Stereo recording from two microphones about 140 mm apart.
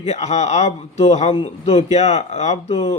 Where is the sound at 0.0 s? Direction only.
50° left (ahead or behind).